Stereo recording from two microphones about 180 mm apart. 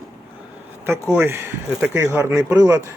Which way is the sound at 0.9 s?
10° right (ahead or behind).